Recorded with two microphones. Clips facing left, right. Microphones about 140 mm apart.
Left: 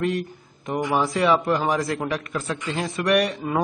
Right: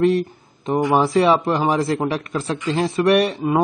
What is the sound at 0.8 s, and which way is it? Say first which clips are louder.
A man's voice: right 5 dB; 35° right (ahead or behind).